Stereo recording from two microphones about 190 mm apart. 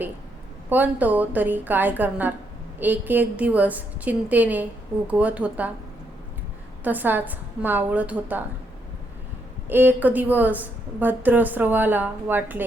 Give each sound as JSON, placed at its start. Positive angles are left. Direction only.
{"t": 0.7, "sound": "a woman's voice", "side_deg": -10}
{"t": 6.8, "sound": "a woman's voice", "side_deg": -10}
{"t": 9.6, "sound": "a woman's voice", "side_deg": -10}